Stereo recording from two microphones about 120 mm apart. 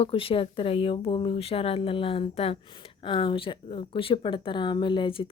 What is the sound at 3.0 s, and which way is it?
Speech, 45° left (ahead or behind).